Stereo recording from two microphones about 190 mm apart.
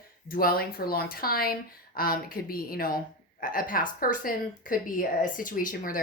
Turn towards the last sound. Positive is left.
turn(degrees=45)  # may be behind; listen again after turning